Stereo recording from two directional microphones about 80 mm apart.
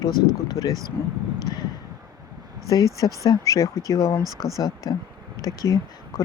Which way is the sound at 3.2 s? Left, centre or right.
Left.